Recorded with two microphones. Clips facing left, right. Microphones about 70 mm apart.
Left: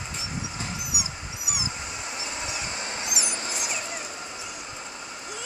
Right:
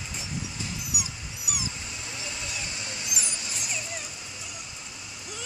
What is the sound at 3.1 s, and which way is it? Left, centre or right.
Mouse, left.